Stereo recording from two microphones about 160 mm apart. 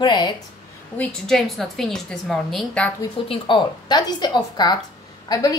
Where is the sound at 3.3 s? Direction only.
30° left (ahead or behind).